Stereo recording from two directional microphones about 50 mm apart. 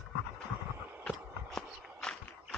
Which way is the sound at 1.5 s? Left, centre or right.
Centre.